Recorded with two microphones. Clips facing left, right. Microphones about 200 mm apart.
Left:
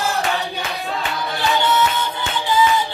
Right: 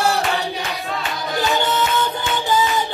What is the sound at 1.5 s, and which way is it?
Music, 45° right (ahead or behind).